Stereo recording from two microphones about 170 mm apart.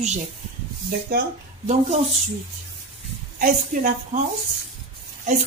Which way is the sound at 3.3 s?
50° right (ahead or behind).